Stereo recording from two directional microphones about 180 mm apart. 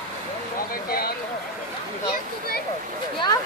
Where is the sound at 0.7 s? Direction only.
55° left (ahead or behind).